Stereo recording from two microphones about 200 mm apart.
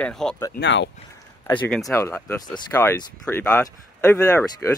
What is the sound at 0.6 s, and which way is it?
Speech, 60° left (ahead or behind).